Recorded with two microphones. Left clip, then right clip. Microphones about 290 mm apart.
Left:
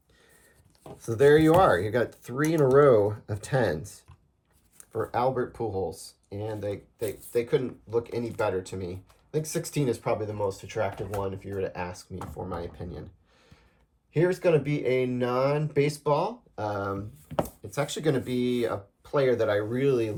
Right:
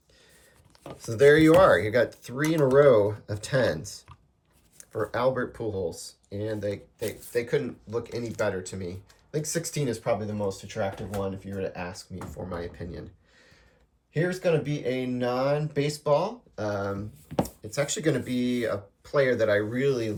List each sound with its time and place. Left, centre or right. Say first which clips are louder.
1.0 s speech: right 1 dB; centre
4.8 s speech: even; centre
7.0 s speech: left 2 dB; centre
7.3 s speech: left 1 dB; centre
14.1 s speech: left 2 dB; centre